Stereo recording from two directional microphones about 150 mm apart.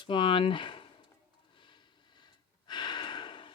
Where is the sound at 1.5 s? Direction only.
30° left (ahead or behind).